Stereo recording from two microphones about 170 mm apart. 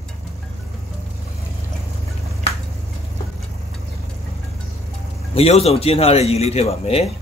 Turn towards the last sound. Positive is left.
turn(degrees=35)  # may be behind; listen again after turning